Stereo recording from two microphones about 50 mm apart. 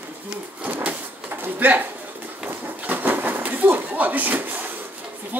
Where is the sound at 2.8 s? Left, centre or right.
Right.